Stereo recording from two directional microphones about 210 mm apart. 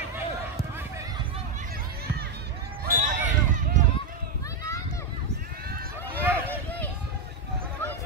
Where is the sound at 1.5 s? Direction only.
40° right (ahead or behind).